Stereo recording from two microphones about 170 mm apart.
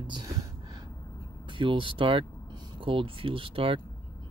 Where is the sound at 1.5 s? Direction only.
30° right (ahead or behind).